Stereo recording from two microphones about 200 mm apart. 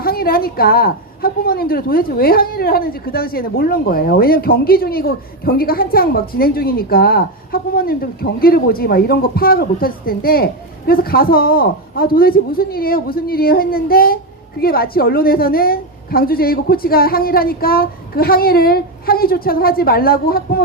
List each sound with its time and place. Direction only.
0.0 s a woman's voice: 50° left (ahead or behind)